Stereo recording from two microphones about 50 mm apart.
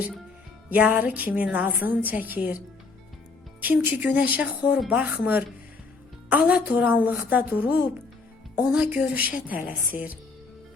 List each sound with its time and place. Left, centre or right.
0.7 s a woman's voice: right
3.6 s speech: right
6.4 s a woman's voice: right